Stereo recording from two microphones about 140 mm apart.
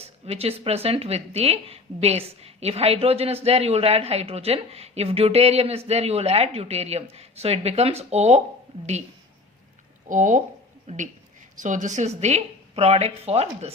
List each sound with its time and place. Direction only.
0.0 s speech: 45° right (ahead or behind)
10.1 s speech: 65° right (ahead or behind); by 13.7 s 50° right (ahead or behind)